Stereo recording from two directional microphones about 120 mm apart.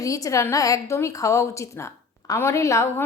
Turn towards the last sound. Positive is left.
turn(degrees=25)  # may be behind; listen again after turning